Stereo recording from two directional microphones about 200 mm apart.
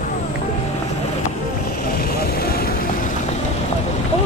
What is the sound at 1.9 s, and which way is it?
Vehicle, 50° left (ahead or behind).